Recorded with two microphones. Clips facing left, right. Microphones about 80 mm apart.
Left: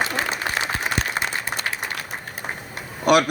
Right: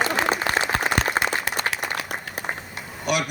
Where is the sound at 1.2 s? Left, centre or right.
Right.